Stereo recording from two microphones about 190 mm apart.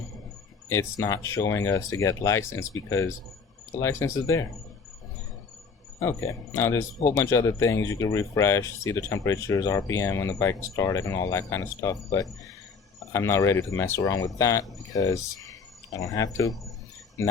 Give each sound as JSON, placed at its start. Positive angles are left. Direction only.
{"t": 0.7, "sound": "speech", "side_deg": 15}
{"t": 6.0, "sound": "speech", "side_deg": 15}